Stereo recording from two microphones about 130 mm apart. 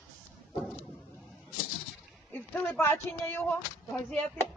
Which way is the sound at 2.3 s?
15° left (ahead or behind).